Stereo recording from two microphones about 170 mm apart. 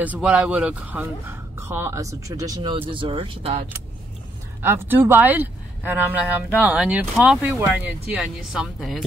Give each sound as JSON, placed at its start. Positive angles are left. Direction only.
{"t": 0.0, "sound": "speech", "side_deg": -10}
{"t": 4.6, "sound": "speech", "side_deg": -10}